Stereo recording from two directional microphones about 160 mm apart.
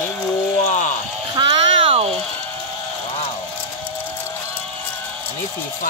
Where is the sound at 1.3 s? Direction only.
30° right (ahead or behind).